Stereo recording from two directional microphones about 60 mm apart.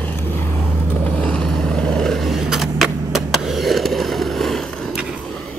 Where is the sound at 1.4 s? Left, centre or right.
Centre.